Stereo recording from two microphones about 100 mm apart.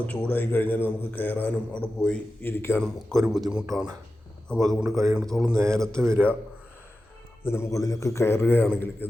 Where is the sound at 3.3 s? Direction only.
5° right (ahead or behind).